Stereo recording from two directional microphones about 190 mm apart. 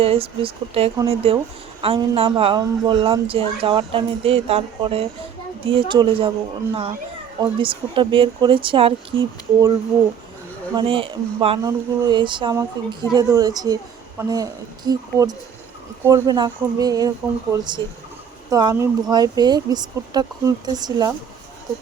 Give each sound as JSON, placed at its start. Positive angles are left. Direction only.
{"t": 0.0, "sound": "speech", "side_deg": -30}
{"t": 7.6, "sound": "speech", "side_deg": -25}
{"t": 10.8, "sound": "speech", "side_deg": -30}